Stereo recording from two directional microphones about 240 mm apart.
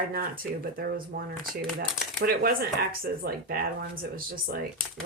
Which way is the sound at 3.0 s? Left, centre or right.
Right.